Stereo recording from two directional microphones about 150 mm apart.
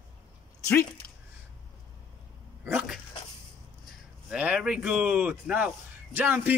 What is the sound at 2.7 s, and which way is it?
Dog, 10° right (ahead or behind).